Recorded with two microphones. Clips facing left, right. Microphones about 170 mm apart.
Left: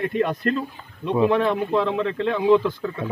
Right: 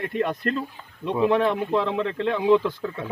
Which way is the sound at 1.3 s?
15° right (ahead or behind).